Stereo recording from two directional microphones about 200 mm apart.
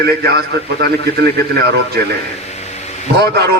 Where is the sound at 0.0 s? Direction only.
55° right (ahead or behind).